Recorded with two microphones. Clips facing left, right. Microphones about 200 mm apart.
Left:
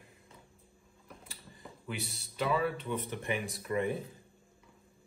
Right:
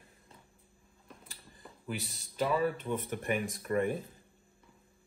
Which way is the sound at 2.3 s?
45° right (ahead or behind).